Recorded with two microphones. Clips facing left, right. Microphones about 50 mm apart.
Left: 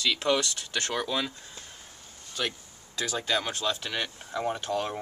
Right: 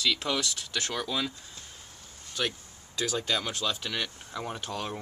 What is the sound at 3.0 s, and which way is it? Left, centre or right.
Speech, centre.